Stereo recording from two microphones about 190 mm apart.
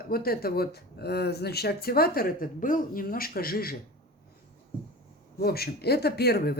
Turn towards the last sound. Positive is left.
turn(degrees=55)  # may be behind; listen again after turning